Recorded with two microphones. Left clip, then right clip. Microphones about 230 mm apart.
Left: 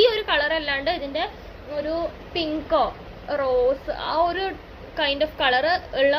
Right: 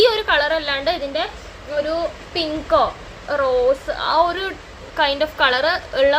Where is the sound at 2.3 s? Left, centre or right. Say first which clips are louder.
Right 4 dB; centre.